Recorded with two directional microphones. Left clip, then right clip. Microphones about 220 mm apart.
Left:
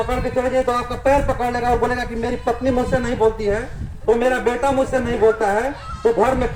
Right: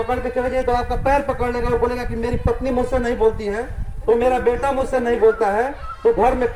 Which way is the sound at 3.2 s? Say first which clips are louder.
Left 1 dB; 25° left (ahead or behind).